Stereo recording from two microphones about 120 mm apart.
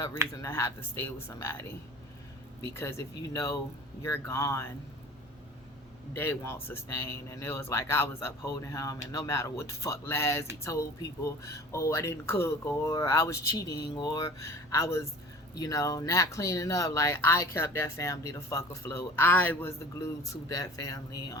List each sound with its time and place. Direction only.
0.4 s speech: 25° left (ahead or behind)
2.7 s speech: 25° left (ahead or behind)
6.1 s speech: 20° left (ahead or behind)